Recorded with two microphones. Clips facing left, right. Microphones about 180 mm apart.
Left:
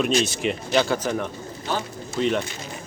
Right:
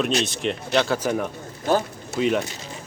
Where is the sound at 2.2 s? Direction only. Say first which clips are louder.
Right 1 dB; 5° right (ahead or behind).